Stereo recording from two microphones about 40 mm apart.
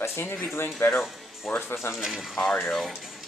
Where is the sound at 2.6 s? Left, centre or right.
Centre.